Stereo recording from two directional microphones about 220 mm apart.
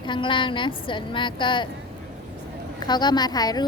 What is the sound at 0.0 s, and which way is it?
A woman's voice, 20° left (ahead or behind).